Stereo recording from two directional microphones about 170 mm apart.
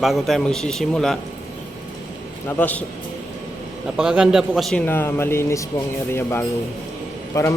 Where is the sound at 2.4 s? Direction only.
10° left (ahead or behind).